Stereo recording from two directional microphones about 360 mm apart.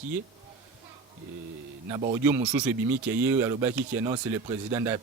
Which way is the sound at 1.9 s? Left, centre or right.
Centre.